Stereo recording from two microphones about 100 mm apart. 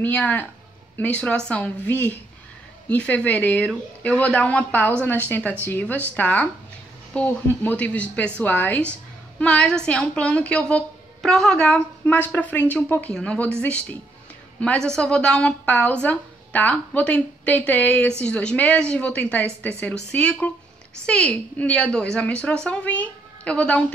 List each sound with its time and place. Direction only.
0.0 s a woman's voice: 15° left (ahead or behind)